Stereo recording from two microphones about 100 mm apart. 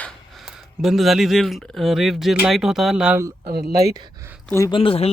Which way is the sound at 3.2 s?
30° right (ahead or behind).